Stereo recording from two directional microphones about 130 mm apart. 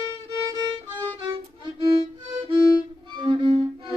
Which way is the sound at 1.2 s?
35° right (ahead or behind).